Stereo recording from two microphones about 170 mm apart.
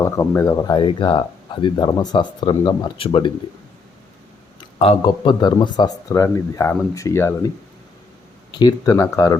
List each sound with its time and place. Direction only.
0.0 s speech: 15° left (ahead or behind); by 3.3 s 30° left (ahead or behind)
4.8 s speech: 30° left (ahead or behind)
8.5 s speech: 20° left (ahead or behind)